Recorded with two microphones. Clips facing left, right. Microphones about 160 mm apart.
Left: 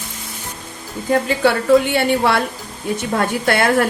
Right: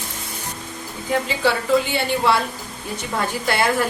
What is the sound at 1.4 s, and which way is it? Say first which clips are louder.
Speech: left 5 dB; 55° left (ahead or behind).